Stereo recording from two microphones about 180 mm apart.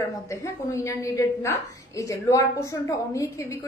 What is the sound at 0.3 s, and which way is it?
A woman's voice, 15° left (ahead or behind).